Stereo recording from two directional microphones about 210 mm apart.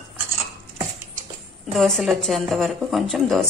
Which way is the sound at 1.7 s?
Centre (ahead or behind).